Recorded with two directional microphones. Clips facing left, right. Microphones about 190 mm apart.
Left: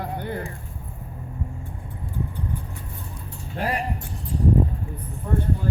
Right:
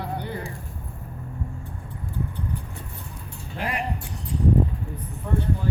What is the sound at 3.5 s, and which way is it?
Speech, 40° left (ahead or behind).